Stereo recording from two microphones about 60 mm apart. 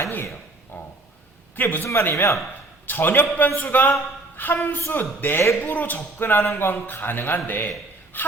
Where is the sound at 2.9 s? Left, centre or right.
Left.